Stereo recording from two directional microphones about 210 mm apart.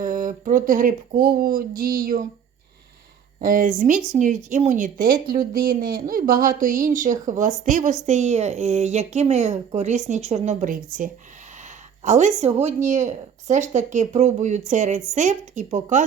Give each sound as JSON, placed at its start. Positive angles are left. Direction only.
{"t": 0.0, "sound": "a woman's voice", "side_deg": -40}
{"t": 3.4, "sound": "a woman's voice", "side_deg": -40}
{"t": 11.6, "sound": "a sound", "side_deg": -35}
{"t": 12.4, "sound": "a woman's voice", "side_deg": -30}